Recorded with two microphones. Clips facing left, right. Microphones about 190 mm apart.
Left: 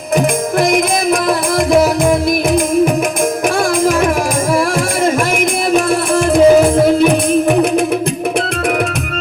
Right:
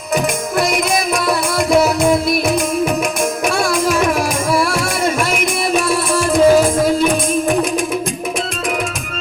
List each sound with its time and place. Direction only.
5.7 s music: 60° left (ahead or behind)